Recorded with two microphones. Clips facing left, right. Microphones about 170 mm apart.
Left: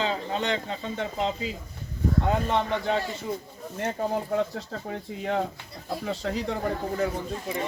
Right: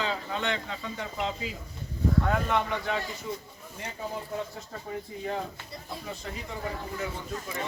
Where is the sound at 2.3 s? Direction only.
30° left (ahead or behind).